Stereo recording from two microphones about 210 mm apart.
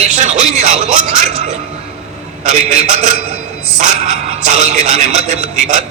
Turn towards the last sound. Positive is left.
turn(degrees=-35)  # may be behind; listen again after turning